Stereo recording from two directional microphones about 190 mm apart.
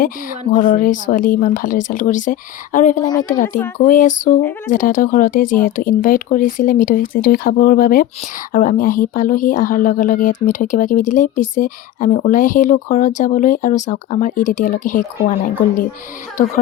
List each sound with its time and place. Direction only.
0.0 s speech: 45° left (ahead or behind)